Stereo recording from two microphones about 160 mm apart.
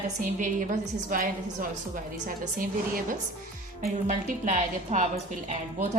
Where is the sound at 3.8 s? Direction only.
50° right (ahead or behind).